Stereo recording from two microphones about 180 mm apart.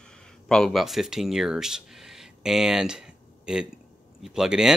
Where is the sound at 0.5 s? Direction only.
Centre (ahead or behind).